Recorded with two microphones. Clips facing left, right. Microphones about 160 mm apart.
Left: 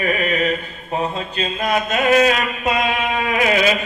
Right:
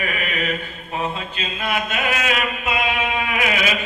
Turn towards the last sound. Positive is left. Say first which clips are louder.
# left 5 dB
turn(degrees=35)  # may be behind; listen again after turning